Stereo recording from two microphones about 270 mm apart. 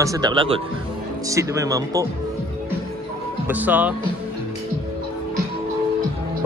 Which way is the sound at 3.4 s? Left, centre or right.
Centre.